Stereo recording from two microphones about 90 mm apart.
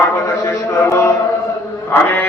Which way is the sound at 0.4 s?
30° left (ahead or behind).